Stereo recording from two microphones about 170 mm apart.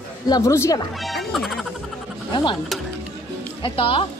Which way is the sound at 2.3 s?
25° left (ahead or behind).